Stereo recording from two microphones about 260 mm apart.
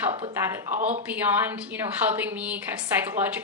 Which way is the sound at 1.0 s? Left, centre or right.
Centre.